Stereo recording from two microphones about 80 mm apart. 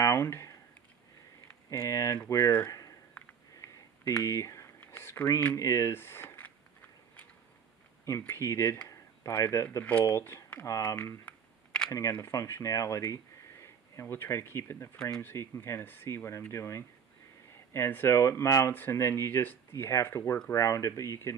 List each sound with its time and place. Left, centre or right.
0.0 s speech: left
1.7 s speech: left
3.6 s a sound: left
4.2 s speech: left
4.7 s a sound: left
5.6 s speech: left
8.3 s speech: left
11.2 s camera: centre
11.9 s speech: left
15.0 s speech: centre
15.2 s speech: left
20.5 s speech: left